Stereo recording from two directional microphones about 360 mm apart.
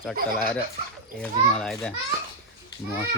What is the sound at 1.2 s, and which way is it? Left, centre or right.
Speech, centre.